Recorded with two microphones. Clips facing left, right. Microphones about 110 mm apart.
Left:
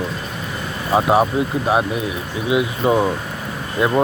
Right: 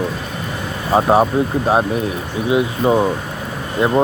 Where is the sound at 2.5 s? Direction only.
30° right (ahead or behind).